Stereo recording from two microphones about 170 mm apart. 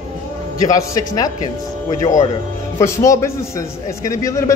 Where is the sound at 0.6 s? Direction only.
20° left (ahead or behind).